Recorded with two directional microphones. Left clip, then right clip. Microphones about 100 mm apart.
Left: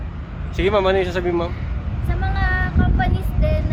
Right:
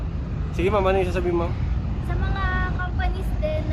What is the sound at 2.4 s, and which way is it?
Speech, 15° right (ahead or behind).